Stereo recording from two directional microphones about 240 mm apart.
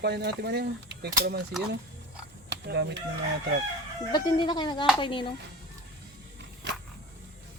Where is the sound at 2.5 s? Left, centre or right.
Right.